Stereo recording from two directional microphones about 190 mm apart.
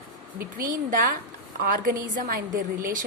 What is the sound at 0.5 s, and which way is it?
A woman's voice, 45° right (ahead or behind).